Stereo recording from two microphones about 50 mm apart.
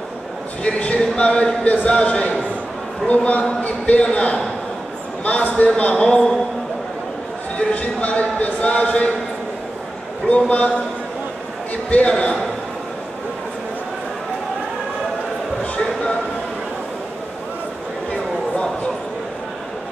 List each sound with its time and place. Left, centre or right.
0.7 s a sound: left
1.1 s a man's voice: left
7.5 s a sound: left
10.2 s speech: left
12.1 s speech: centre
15.8 s speech: centre